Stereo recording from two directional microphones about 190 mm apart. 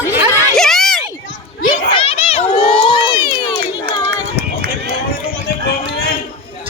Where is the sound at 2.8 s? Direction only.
25° left (ahead or behind).